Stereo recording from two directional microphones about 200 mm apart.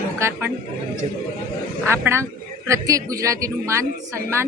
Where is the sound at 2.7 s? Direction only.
15° right (ahead or behind).